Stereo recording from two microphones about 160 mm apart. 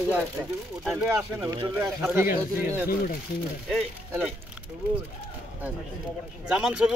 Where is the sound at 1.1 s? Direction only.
20° right (ahead or behind).